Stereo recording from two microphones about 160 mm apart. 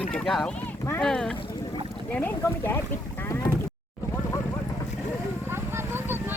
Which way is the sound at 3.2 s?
15° left (ahead or behind).